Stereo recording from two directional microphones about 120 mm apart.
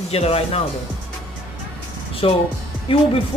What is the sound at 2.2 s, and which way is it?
Speech, 50° left (ahead or behind).